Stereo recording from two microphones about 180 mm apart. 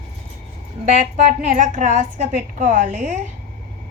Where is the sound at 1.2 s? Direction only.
40° right (ahead or behind).